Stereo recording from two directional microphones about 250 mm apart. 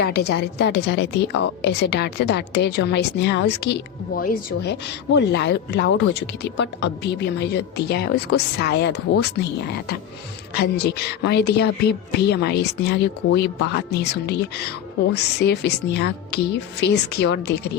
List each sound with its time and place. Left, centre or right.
0.0 s a woman's voice: left